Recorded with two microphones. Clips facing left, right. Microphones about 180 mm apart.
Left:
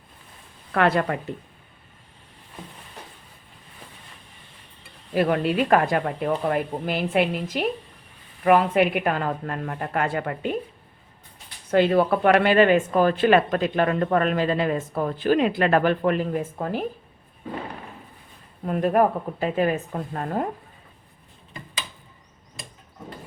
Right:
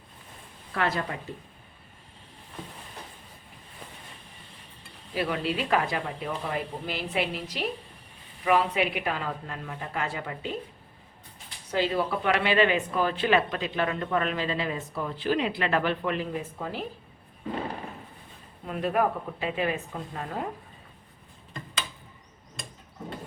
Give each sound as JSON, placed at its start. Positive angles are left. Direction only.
{"t": 0.7, "sound": "speech", "side_deg": 65}
{"t": 5.1, "sound": "speech", "side_deg": 50}
{"t": 11.7, "sound": "speech", "side_deg": 55}
{"t": 18.6, "sound": "speech", "side_deg": 45}